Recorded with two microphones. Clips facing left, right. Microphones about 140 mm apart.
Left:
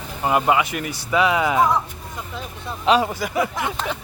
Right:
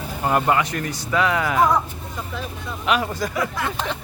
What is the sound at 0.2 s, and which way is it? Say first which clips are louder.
Speech: left 1 dB; 10° left (ahead or behind).